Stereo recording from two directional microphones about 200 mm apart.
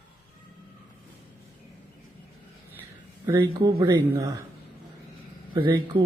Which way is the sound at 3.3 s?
15° right (ahead or behind).